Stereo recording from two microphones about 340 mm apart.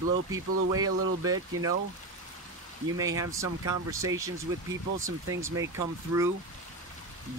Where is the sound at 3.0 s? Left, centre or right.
Centre.